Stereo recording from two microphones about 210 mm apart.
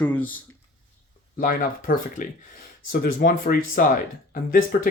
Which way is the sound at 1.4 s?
40° left (ahead or behind).